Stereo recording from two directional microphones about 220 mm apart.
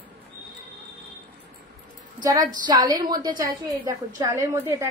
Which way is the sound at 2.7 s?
20° right (ahead or behind).